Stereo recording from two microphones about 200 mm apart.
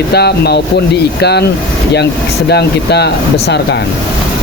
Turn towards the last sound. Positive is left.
turn(degrees=55)  # may be behind; listen again after turning